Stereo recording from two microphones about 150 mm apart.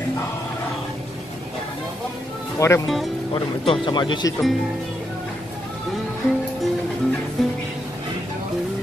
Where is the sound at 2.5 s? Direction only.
20° left (ahead or behind).